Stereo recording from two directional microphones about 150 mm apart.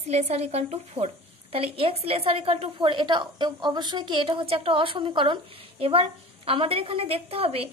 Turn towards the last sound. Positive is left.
turn(degrees=-40)  # may be behind; listen again after turning